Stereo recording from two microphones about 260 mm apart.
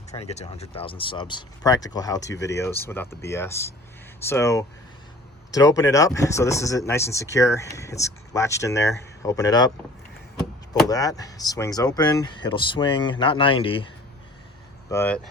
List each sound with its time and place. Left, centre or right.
0.2 s speech: left
10.8 s speech: centre
14.8 s speech: centre